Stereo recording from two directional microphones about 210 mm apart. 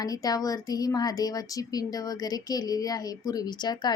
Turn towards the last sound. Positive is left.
turn(degrees=20)  # may be behind; listen again after turning